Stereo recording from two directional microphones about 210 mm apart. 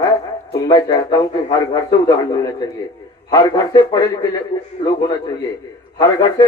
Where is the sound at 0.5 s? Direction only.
15° left (ahead or behind).